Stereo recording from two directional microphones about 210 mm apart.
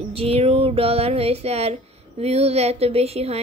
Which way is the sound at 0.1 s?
30° right (ahead or behind).